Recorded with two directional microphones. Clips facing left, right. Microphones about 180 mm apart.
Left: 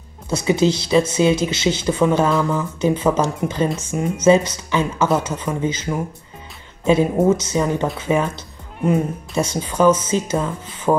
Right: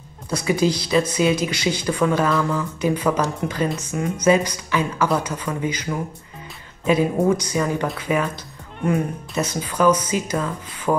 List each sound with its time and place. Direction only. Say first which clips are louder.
0.3 s speech: left 3 dB; 25° left (ahead or behind)
6.9 s speech: left 3 dB; 25° left (ahead or behind)